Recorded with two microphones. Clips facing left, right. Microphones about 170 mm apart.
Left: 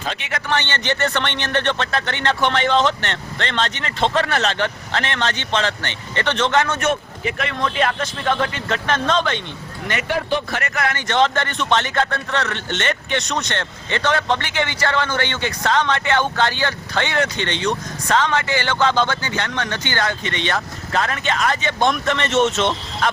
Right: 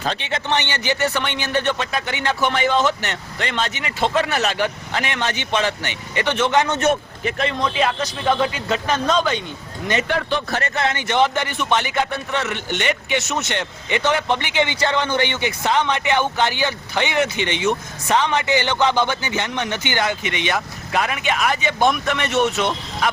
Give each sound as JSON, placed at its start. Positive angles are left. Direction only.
{"t": 0.1, "sound": "a man's voice", "side_deg": -30}
{"t": 0.6, "sound": "speech", "side_deg": -10}
{"t": 10.5, "sound": "speech", "side_deg": -25}
{"t": 22.6, "sound": "speech", "side_deg": -5}